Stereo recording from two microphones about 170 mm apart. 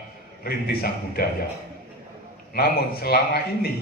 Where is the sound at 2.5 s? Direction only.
65° left (ahead or behind).